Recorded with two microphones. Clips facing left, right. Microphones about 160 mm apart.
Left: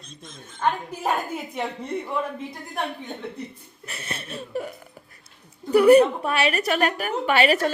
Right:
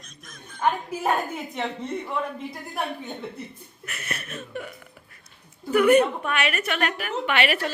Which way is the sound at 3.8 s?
30° left (ahead or behind).